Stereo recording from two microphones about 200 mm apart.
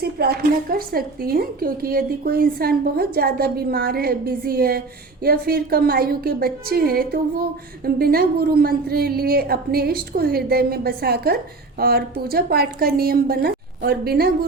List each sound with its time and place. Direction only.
0.0 s speech: 50° right (ahead or behind)